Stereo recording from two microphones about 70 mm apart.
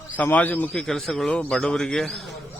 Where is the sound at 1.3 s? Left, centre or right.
Centre.